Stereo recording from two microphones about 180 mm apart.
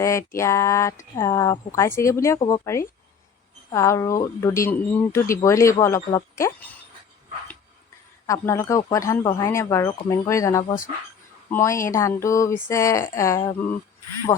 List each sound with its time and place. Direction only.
0.0 s speech: 15° left (ahead or behind)
8.3 s speech: 15° left (ahead or behind)